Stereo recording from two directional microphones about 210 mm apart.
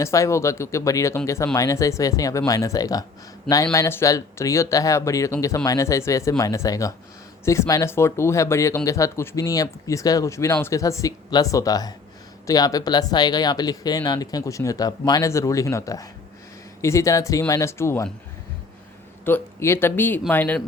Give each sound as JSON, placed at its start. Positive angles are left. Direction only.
{"t": 0.0, "sound": "speech", "side_deg": 15}
{"t": 19.2, "sound": "speech", "side_deg": 10}